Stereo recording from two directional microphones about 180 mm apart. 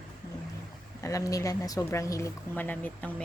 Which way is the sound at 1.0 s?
20° left (ahead or behind).